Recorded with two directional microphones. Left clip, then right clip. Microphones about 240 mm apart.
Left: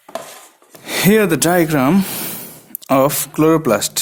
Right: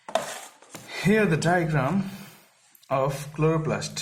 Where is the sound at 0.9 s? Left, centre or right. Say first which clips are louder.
Left 9 dB; left.